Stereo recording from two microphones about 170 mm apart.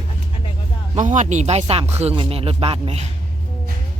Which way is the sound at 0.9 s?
45° right (ahead or behind).